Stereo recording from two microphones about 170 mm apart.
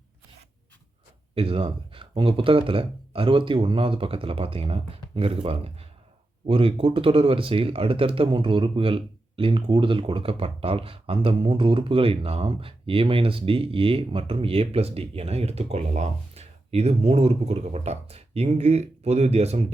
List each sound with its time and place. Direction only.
1.4 s speech: 35° right (ahead or behind)